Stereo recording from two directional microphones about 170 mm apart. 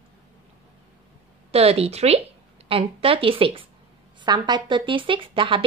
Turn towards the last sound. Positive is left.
turn(degrees=-30)  # may be behind; listen again after turning